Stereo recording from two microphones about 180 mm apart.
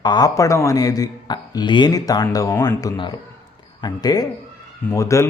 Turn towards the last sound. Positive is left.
turn(degrees=15)  # may be behind; listen again after turning